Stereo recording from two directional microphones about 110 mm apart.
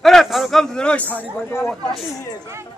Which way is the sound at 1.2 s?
20° left (ahead or behind).